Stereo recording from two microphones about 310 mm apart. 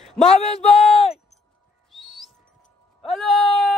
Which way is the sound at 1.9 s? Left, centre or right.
Centre.